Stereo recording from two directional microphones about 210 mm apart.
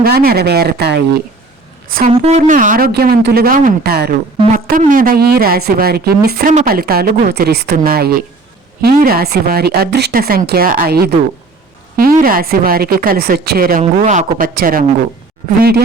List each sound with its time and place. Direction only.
0.0 s a woman's voice: 45° right (ahead or behind)